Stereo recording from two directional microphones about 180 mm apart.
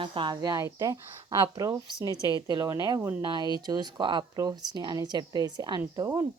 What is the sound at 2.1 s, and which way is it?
Speech, 20° left (ahead or behind).